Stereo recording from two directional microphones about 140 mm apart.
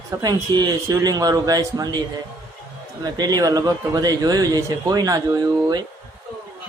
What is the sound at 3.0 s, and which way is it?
Speech, 30° right (ahead or behind).